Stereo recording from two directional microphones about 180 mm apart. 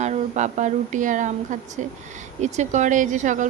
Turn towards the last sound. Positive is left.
turn(degrees=-45)  # may be behind; listen again after turning